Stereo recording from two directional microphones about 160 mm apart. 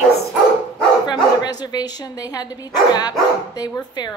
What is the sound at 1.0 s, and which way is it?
Speech, 25° left (ahead or behind).